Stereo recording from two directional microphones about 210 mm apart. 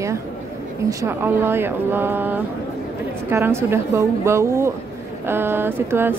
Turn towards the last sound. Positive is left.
turn(degrees=-10)  # may be behind; listen again after turning